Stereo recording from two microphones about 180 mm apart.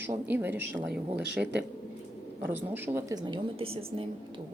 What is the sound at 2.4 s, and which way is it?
Speech, 10° right (ahead or behind).